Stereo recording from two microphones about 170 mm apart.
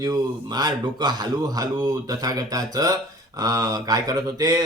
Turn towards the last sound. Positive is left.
turn(degrees=-20)  # may be behind; listen again after turning